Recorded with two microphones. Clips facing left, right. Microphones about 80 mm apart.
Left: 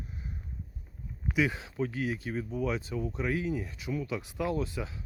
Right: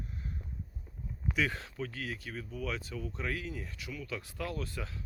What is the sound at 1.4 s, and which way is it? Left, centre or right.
Speech, centre.